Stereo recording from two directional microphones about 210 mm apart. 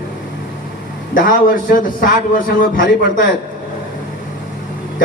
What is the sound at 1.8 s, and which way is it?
A man's voice, 40° left (ahead or behind).